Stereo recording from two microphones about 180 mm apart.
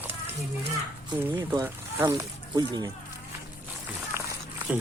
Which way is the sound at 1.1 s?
10° right (ahead or behind).